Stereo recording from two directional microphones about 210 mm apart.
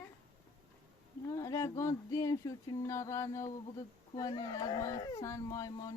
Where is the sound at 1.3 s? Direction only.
15° left (ahead or behind).